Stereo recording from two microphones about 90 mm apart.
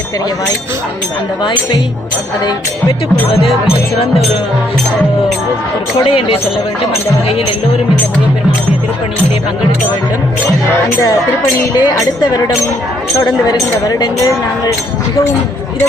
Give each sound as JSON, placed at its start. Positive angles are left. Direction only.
{"t": 6.1, "sound": "speech", "side_deg": 90}
{"t": 11.7, "sound": "speech", "side_deg": 50}
{"t": 13.5, "sound": "speech", "side_deg": 50}